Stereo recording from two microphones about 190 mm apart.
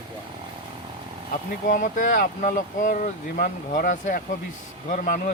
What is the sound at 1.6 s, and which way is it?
Speech, 45° left (ahead or behind).